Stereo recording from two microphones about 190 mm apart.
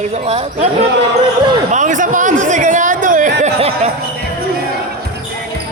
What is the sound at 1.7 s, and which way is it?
Speech, 40° right (ahead or behind).